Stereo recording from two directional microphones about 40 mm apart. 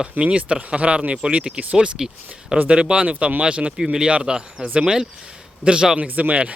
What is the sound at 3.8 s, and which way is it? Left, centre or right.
Speech, centre.